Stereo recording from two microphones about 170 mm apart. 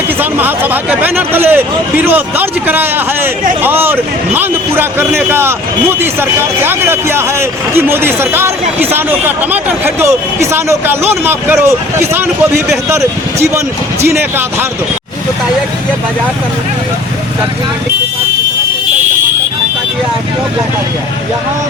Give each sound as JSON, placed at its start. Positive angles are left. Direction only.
{"t": 0.2, "sound": "a man's voice", "side_deg": -10}